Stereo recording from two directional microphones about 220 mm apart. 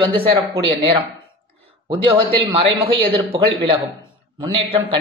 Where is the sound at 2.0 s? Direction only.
25° right (ahead or behind).